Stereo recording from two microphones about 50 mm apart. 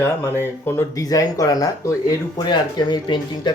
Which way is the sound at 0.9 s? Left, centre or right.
Left.